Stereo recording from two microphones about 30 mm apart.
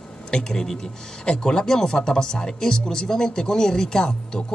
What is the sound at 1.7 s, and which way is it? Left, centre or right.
Speech, centre.